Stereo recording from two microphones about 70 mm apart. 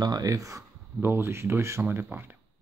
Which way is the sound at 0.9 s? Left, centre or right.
Right.